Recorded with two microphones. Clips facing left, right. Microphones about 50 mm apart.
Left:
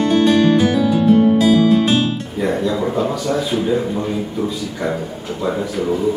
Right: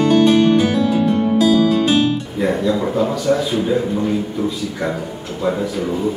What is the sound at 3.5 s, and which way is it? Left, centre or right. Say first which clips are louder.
Speech: even; centre.